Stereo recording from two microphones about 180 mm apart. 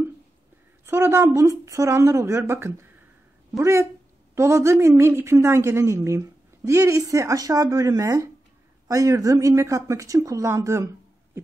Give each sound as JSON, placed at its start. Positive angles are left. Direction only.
{"t": 0.8, "sound": "a woman's voice", "side_deg": -15}